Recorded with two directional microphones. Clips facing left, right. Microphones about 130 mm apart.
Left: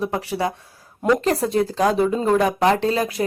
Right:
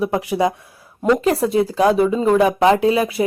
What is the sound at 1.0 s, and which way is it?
Speech, 5° right (ahead or behind).